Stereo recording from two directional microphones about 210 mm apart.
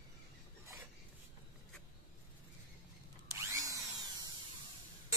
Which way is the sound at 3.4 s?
15° right (ahead or behind).